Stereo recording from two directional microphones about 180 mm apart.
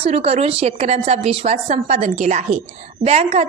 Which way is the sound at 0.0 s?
35° right (ahead or behind).